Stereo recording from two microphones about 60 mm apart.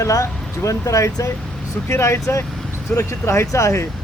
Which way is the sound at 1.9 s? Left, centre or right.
Left.